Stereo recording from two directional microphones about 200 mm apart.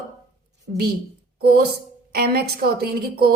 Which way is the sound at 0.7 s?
45° right (ahead or behind).